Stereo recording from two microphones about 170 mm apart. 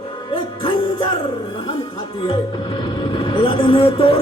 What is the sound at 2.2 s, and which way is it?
Speech, 30° left (ahead or behind).